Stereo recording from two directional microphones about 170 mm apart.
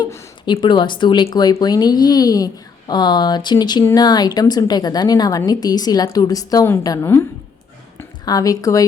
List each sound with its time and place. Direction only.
0.0 s a woman's voice: 25° left (ahead or behind)